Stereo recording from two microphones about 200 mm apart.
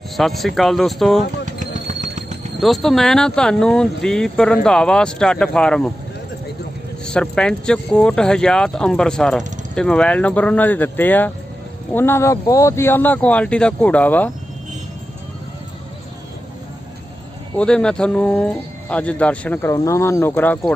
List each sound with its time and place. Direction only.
0.2 s speech: centre (ahead or behind)
1.5 s a sound: 40° right (ahead or behind)
2.6 s speech: centre (ahead or behind)
7.0 s speech: 5° left (ahead or behind)
17.6 s speech: 5° left (ahead or behind)